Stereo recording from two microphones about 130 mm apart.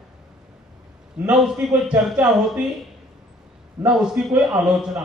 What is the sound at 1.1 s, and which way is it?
A man's voice, 10° right (ahead or behind).